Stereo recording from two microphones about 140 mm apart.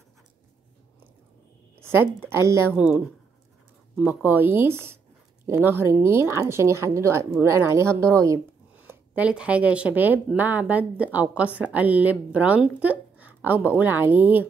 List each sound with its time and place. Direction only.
1.8 s speech: 15° right (ahead or behind)
4.0 s speech: 15° right (ahead or behind)
8.8 s speech: 10° right (ahead or behind)